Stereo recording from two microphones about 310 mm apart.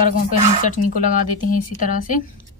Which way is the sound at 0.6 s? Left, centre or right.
Left.